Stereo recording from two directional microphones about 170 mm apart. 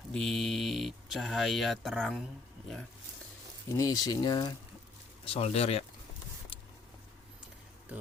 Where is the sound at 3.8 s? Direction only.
20° left (ahead or behind).